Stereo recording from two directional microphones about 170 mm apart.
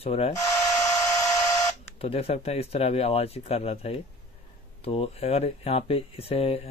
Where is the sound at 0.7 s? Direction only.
20° left (ahead or behind).